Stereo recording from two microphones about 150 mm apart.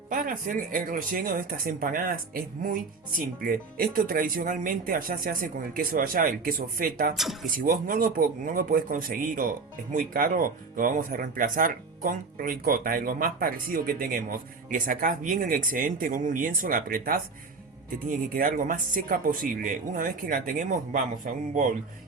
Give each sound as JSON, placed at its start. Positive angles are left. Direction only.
{"t": 0.1, "sound": "speech", "side_deg": -65}
{"t": 18.3, "sound": "speech", "side_deg": -65}